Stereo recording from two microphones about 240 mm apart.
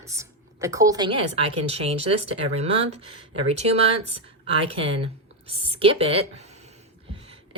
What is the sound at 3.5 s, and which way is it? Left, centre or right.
A woman's voice, right.